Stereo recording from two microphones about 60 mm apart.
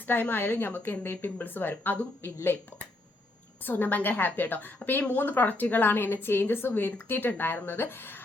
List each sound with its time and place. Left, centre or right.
0.1 s a woman's voice: left